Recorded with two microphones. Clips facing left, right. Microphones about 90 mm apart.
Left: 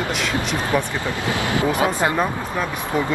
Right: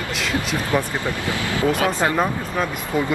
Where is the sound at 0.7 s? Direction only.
20° left (ahead or behind).